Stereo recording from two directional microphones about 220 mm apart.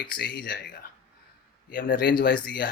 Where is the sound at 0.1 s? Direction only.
45° left (ahead or behind).